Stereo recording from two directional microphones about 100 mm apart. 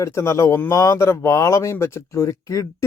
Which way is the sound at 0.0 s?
30° left (ahead or behind).